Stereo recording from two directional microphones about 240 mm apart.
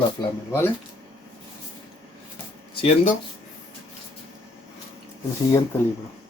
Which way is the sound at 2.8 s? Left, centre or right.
Left.